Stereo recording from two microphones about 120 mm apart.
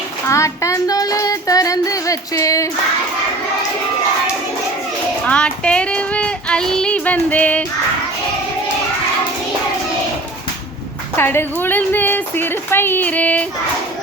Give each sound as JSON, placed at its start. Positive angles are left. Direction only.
{"t": 0.3, "sound": "child singing", "side_deg": 25}
{"t": 5.2, "sound": "child singing", "side_deg": 10}
{"t": 11.2, "sound": "speech", "side_deg": 20}